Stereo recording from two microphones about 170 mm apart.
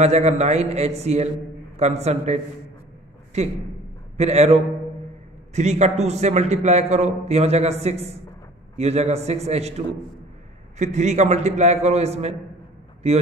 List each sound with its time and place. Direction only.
0.0 s a man's voice: 40° right (ahead or behind)
4.2 s a man's voice: 40° right (ahead or behind)